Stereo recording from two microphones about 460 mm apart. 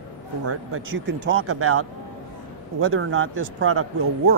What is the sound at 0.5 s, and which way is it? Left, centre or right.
Speech, right.